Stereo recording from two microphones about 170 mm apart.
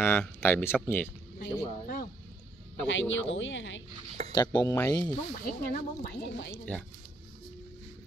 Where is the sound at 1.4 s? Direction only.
55° left (ahead or behind).